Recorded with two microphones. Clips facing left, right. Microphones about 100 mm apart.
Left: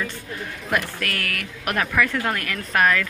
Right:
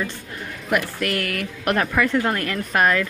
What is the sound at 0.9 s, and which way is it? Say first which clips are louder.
A woman's voice: right 4 dB; 25° right (ahead or behind).